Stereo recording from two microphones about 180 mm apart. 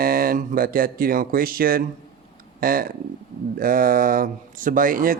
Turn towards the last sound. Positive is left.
turn(degrees=-50)  # may be behind; listen again after turning